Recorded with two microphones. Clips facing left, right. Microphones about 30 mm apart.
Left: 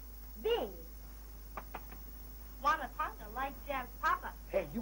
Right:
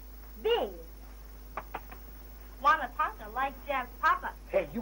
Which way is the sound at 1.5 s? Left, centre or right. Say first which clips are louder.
Right 7 dB; right.